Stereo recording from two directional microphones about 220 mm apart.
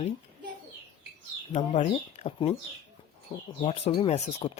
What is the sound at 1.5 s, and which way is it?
Speech, 25° left (ahead or behind).